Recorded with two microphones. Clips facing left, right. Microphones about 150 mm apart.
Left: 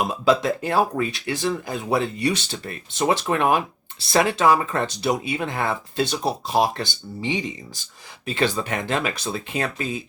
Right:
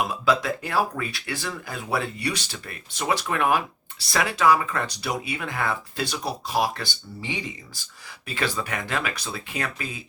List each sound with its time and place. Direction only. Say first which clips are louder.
0.0 s speech: left 4 dB; 25° left (ahead or behind)